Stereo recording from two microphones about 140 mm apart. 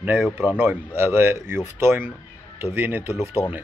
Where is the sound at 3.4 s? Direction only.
25° left (ahead or behind).